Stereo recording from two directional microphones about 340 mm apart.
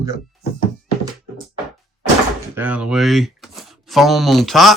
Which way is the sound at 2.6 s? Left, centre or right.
Centre.